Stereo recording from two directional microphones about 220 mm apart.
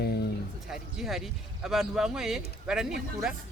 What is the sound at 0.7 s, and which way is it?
Speech, centre (ahead or behind).